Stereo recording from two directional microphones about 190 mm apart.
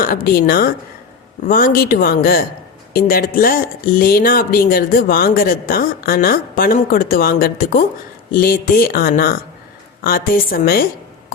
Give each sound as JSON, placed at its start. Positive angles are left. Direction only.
{"t": 0.0, "sound": "speech", "side_deg": 50}